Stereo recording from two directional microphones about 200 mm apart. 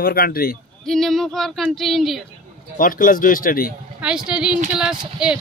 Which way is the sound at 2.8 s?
45° left (ahead or behind).